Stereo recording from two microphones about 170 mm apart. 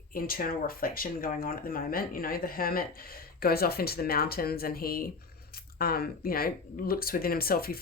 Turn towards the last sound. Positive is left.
turn(degrees=60)  # may be behind; listen again after turning